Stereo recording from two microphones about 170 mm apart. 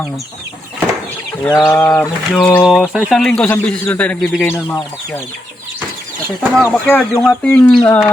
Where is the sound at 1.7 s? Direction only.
5° left (ahead or behind).